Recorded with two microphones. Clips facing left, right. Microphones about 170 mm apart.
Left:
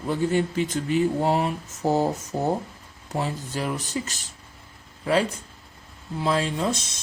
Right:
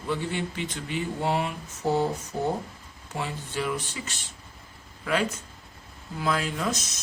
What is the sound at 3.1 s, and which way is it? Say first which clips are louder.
Speech: left 5 dB; 40° left (ahead or behind).